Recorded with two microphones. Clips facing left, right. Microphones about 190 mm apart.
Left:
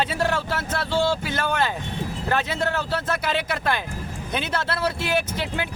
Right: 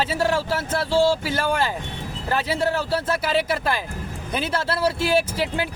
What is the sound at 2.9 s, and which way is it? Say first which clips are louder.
Speech: right 2 dB; 30° right (ahead or behind).